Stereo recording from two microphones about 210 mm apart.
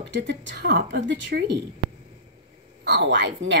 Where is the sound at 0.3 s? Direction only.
55° right (ahead or behind).